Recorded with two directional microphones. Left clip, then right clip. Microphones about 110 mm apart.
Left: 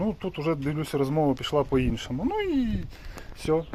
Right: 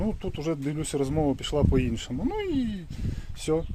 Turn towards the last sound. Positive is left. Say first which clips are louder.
# left 2 dB
turn(degrees=-25)  # may be behind; listen again after turning